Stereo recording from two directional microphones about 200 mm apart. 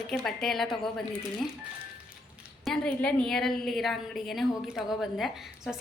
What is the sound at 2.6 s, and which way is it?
A woman's voice, 5° left (ahead or behind).